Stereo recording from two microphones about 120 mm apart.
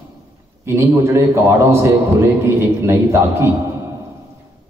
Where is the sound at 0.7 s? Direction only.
20° right (ahead or behind).